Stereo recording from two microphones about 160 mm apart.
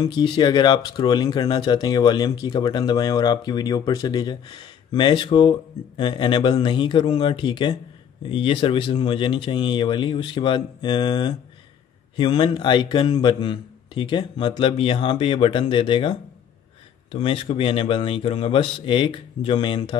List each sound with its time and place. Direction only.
0.0 s a man's voice: 25° left (ahead or behind)